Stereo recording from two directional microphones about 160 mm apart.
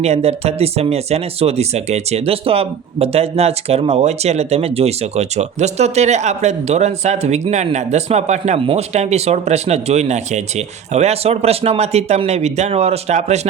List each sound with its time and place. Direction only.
0.0 s speech: 40° right (ahead or behind)